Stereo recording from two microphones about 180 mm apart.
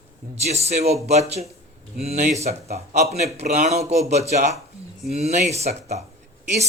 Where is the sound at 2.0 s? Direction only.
40° right (ahead or behind).